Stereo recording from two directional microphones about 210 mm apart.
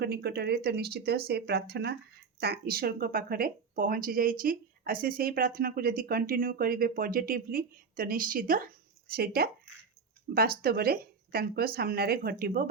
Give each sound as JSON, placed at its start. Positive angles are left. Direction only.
{"t": 0.0, "sound": "speech", "side_deg": -50}